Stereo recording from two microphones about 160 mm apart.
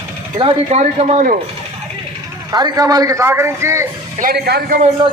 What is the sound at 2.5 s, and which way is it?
A man's voice, 25° right (ahead or behind).